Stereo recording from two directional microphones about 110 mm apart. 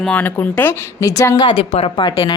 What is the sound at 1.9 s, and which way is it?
Speech, 45° left (ahead or behind).